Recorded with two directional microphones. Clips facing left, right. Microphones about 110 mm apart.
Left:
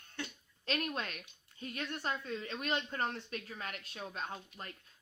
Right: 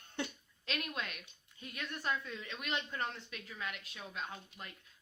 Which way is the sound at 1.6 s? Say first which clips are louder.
Left 2 dB; 35° left (ahead or behind).